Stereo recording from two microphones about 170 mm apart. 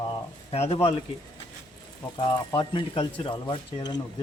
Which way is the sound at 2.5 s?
30° left (ahead or behind).